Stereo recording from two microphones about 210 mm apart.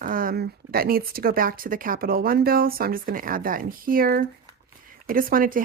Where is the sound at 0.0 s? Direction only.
40° right (ahead or behind).